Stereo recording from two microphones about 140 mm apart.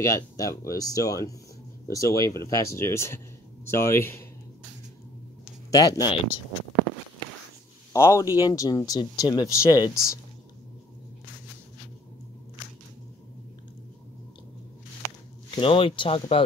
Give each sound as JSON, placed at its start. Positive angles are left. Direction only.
{"t": 0.0, "sound": "speech", "side_deg": 20}
{"t": 5.7, "sound": "speech", "side_deg": 25}
{"t": 7.9, "sound": "speech", "side_deg": 25}
{"t": 15.5, "sound": "speech", "side_deg": 40}